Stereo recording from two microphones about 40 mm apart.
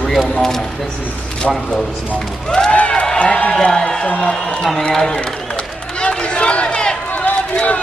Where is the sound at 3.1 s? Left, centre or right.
Left.